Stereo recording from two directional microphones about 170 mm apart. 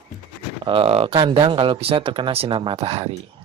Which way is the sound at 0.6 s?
30° right (ahead or behind).